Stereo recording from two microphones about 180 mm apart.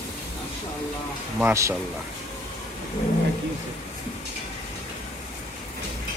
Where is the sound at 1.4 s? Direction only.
15° right (ahead or behind).